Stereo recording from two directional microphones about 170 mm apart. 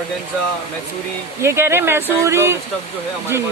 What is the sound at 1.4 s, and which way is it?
Speech, 15° right (ahead or behind).